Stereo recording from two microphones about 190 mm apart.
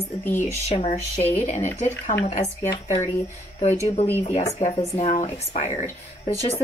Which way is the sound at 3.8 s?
30° left (ahead or behind).